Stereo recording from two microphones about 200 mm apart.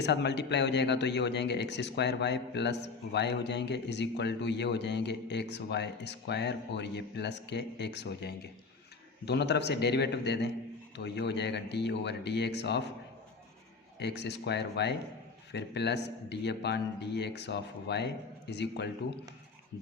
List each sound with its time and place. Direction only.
0.0 s speech: 60° left (ahead or behind)
14.0 s speech: 60° left (ahead or behind)